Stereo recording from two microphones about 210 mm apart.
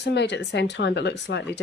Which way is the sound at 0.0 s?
55° left (ahead or behind).